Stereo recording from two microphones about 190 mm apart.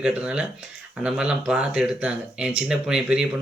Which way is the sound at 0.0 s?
5° right (ahead or behind).